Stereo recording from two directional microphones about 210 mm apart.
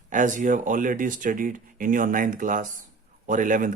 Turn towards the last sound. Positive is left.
turn(degrees=-40)  # may be behind; listen again after turning